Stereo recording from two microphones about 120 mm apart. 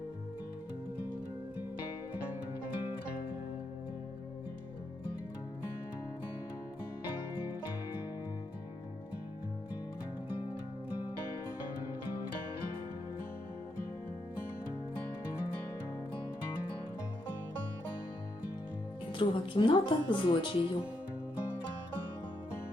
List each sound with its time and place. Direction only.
19.1 s speech: 45° left (ahead or behind)